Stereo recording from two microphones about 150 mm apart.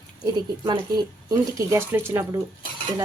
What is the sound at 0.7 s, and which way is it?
Speech, 25° right (ahead or behind).